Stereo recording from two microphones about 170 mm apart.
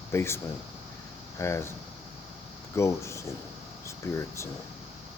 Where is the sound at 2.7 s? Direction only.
15° left (ahead or behind).